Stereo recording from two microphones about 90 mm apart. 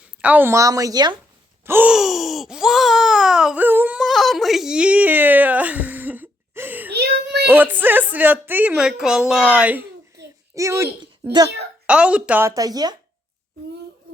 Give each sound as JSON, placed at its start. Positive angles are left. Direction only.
{"t": 0.2, "sound": "a woman's voice", "side_deg": -15}
{"t": 0.4, "sound": "speech", "side_deg": -35}
{"t": 1.6, "sound": "gasp", "side_deg": -25}
{"t": 1.9, "sound": "baby cry", "side_deg": -5}
{"t": 3.6, "sound": "a sound", "side_deg": -20}
{"t": 3.9, "sound": "whimper", "side_deg": 0}
{"t": 7.4, "sound": "speech", "side_deg": -20}
{"t": 8.7, "sound": "a woman's voice", "side_deg": -5}
{"t": 10.2, "sound": "a sound", "side_deg": -35}
{"t": 11.0, "sound": "a child's voice", "side_deg": -50}
{"t": 11.9, "sound": "a woman's voice", "side_deg": -10}
{"t": 12.5, "sound": "speech", "side_deg": -45}